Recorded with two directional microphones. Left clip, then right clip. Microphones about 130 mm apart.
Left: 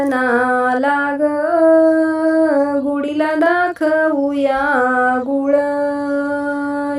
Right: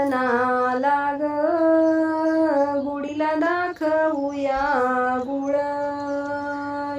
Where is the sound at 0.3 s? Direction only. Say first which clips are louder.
Left 7 dB; 35° left (ahead or behind).